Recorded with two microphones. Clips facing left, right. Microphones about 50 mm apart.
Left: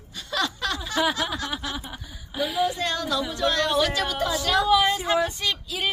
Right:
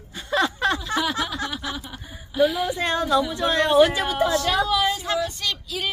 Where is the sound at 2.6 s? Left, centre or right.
Right.